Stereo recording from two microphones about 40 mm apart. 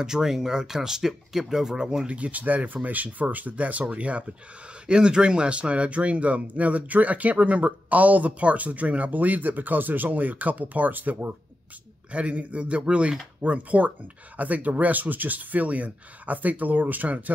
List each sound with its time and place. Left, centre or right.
0.0 s speech: centre
2.0 s speech: right
4.8 s speech: right
12.1 s speech: right